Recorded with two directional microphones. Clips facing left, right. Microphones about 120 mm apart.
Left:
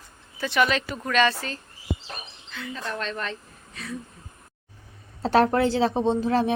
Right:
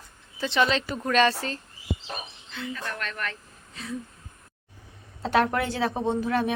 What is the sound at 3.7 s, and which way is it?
Speech, 25° right (ahead or behind).